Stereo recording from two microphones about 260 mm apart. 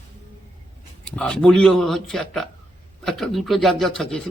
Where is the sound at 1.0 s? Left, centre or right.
Centre.